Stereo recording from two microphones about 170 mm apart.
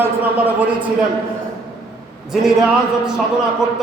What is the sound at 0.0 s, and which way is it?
Speech, 10° right (ahead or behind).